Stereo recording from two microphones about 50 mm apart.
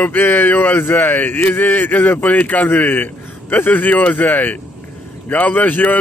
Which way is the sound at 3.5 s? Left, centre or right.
Left.